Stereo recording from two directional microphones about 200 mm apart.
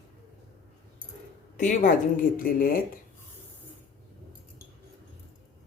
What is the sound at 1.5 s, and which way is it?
Speech, 40° left (ahead or behind).